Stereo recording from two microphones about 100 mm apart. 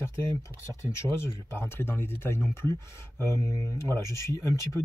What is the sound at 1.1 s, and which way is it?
Speech, 25° left (ahead or behind).